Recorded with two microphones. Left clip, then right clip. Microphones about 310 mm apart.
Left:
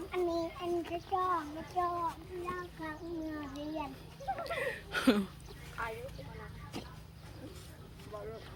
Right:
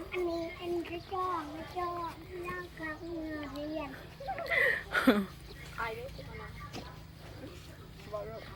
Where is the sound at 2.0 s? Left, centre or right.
Centre.